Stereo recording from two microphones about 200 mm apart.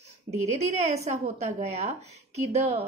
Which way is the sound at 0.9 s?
35° right (ahead or behind).